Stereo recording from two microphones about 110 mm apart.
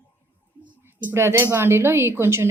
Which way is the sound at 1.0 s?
20° right (ahead or behind).